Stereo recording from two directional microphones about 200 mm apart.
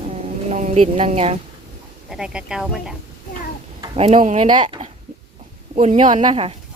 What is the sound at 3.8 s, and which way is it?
A woman's voice, 25° right (ahead or behind).